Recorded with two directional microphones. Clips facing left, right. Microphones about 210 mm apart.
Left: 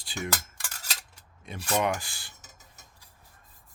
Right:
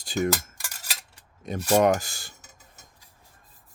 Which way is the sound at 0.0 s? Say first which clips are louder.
Right 10 dB; 45° right (ahead or behind).